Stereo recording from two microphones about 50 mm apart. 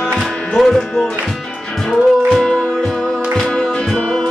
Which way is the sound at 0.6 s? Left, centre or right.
Centre.